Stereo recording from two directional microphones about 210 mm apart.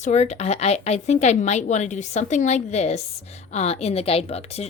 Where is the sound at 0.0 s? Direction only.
30° left (ahead or behind).